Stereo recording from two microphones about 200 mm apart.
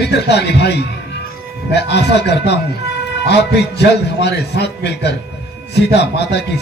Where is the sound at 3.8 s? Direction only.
55° left (ahead or behind).